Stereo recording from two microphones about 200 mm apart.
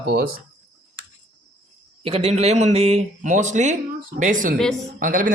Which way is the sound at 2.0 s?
30° right (ahead or behind).